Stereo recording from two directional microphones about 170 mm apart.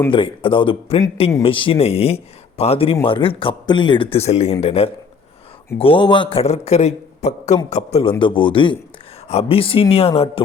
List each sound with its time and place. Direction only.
0.1 s a man's voice: 30° left (ahead or behind)